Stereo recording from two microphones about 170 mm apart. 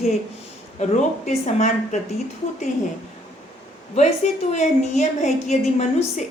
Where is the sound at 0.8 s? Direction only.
45° left (ahead or behind).